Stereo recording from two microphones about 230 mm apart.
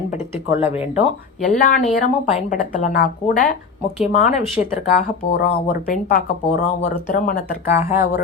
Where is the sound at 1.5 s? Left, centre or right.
Left.